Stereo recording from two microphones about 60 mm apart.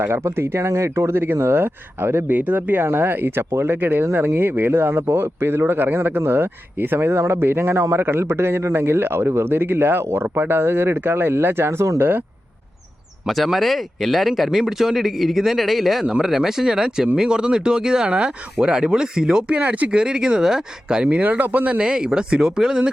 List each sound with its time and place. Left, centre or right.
0.0 s speech: right
2.3 s speech: right
13.2 s speech: centre; by 21.8 s right
21.8 s speech: centre